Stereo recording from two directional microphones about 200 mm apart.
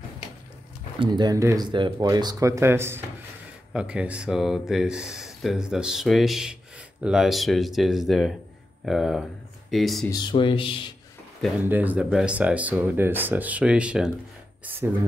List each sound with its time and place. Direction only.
0.9 s speech: 25° right (ahead or behind); by 10.0 s centre (ahead or behind)
10.1 s speech: 25° left (ahead or behind)
11.6 s speech: 10° right (ahead or behind)